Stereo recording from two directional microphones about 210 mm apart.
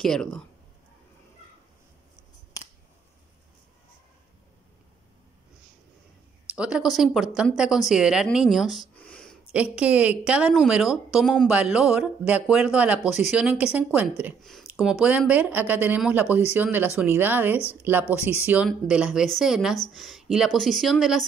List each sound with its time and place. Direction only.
0.0 s a woman's voice: 5° left (ahead or behind)
6.5 s speech: 5° right (ahead or behind)
9.5 s a woman's voice: 5° right (ahead or behind)